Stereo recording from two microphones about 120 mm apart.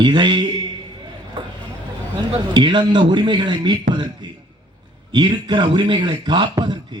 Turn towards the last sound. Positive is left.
turn(degrees=-40)  # may be behind; listen again after turning